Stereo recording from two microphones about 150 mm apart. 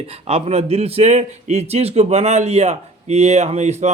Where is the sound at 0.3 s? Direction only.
40° right (ahead or behind).